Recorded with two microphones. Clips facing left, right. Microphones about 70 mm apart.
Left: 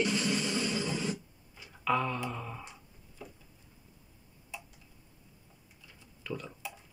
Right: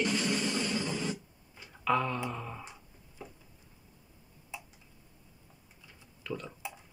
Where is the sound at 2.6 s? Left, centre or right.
Centre.